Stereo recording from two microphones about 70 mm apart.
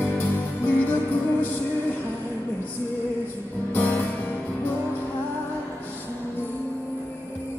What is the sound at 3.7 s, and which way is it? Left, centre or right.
Music, left.